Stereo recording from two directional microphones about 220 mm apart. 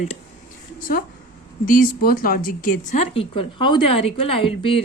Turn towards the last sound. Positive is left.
turn(degrees=25)  # may be behind; listen again after turning